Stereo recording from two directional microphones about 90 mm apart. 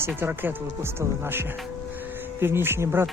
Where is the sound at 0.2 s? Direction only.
20° right (ahead or behind).